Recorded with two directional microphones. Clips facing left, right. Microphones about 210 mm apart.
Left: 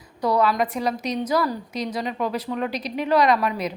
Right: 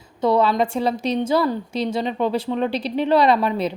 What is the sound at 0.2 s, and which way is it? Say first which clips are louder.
A woman's voice: right 3 dB; 25° right (ahead or behind).